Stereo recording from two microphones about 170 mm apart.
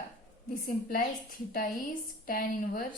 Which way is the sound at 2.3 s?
55° left (ahead or behind).